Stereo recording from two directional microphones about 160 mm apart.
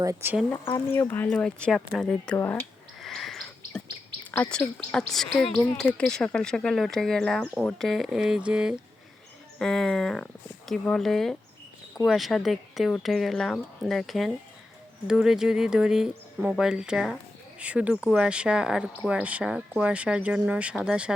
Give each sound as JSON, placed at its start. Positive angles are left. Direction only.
{"t": 0.0, "sound": "speech", "side_deg": -15}
{"t": 0.5, "sound": "speech", "side_deg": 15}
{"t": 3.0, "sound": "a sound", "side_deg": 0}
{"t": 4.3, "sound": "speech", "side_deg": 10}